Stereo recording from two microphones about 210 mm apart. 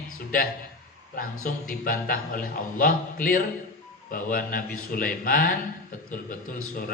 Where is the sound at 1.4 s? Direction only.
40° left (ahead or behind).